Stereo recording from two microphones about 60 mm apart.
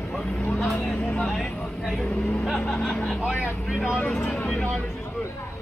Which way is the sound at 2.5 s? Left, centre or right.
Centre.